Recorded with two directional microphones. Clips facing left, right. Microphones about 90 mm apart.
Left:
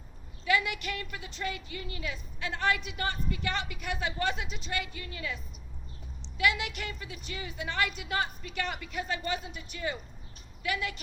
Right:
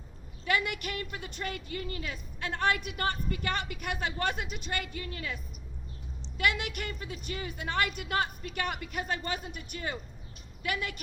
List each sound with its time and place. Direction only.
0.4 s a woman's voice: 50° right (ahead or behind)
6.3 s a woman's voice: 50° right (ahead or behind)